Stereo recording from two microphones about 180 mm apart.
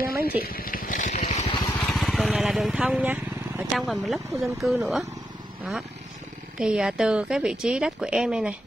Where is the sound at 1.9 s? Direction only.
Centre (ahead or behind).